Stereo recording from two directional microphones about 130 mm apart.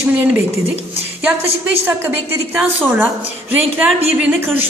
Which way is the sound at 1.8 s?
15° right (ahead or behind).